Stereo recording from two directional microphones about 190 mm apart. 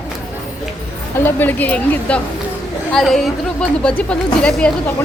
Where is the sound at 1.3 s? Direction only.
10° left (ahead or behind).